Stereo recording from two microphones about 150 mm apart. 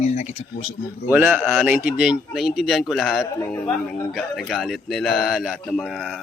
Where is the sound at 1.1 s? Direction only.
10° right (ahead or behind).